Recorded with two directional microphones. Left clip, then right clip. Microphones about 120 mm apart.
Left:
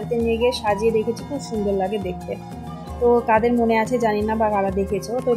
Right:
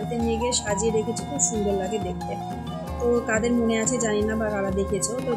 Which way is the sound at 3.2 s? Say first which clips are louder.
Left 6 dB; 10° left (ahead or behind).